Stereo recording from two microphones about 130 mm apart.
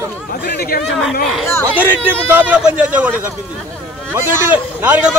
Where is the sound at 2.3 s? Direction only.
15° right (ahead or behind).